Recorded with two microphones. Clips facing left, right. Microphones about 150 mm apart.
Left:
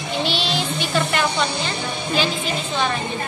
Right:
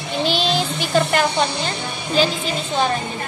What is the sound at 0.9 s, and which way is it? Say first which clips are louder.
Speech: right 4 dB; 40° right (ahead or behind).